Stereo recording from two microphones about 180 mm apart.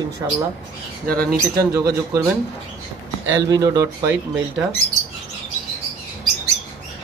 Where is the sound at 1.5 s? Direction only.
15° right (ahead or behind).